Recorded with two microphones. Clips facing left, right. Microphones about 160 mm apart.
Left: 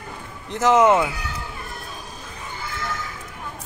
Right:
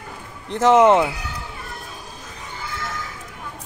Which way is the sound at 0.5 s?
30° right (ahead or behind).